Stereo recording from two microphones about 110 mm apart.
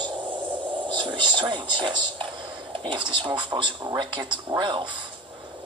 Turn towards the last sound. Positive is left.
turn(degrees=-45)  # may be behind; listen again after turning